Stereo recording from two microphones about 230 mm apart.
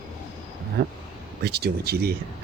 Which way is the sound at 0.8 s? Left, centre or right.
Right.